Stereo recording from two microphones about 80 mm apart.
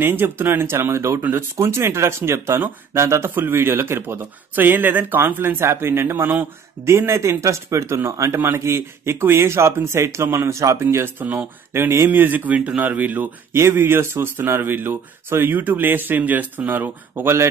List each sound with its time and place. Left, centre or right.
0.0 s speech: right